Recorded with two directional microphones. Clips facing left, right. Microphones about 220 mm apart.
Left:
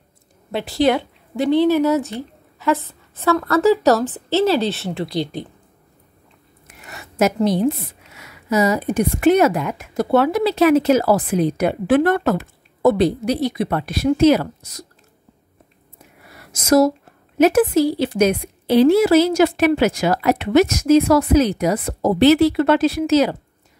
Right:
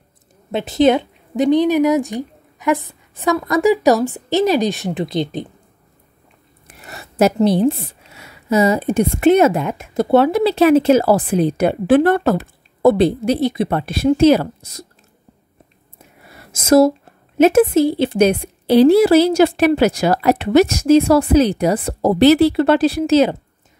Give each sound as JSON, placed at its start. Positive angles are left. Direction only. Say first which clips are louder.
{"t": 0.5, "sound": "a woman's voice", "louder": "right 4 dB", "side_deg": -20}
{"t": 6.7, "sound": "a woman's voice", "louder": "right 2 dB", "side_deg": -35}
{"t": 16.3, "sound": "a sound", "louder": "right 3 dB", "side_deg": -25}
{"t": 17.4, "sound": "a woman's voice", "louder": "right 2 dB", "side_deg": -25}